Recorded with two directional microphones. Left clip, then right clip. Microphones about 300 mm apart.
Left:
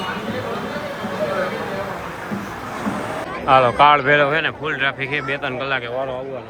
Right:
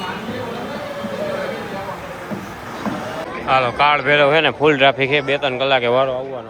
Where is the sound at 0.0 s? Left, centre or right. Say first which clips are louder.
Left 1 dB; centre.